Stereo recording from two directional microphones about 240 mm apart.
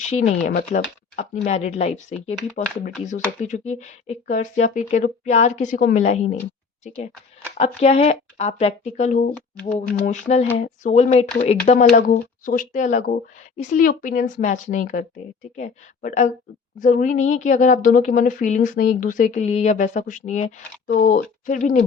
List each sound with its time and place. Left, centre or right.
0.0 s speech: left